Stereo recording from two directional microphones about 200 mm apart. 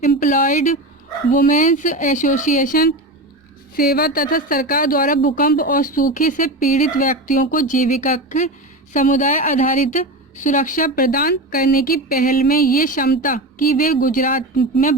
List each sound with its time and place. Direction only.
0.0 s a woman's voice: 40° left (ahead or behind)